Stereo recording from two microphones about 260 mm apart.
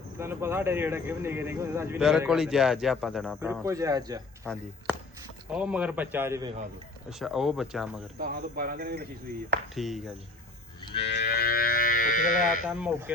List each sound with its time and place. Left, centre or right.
0.2 s speech: centre
4.4 s speech: centre
8.2 s speech: right
9.7 s speech: centre
11.0 s speech: left
12.6 s speech: centre